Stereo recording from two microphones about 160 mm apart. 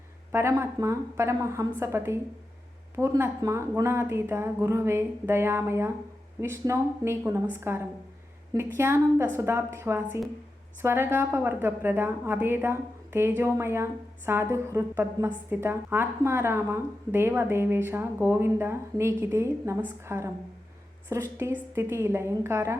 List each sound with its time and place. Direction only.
0.3 s a woman's voice: 15° right (ahead or behind)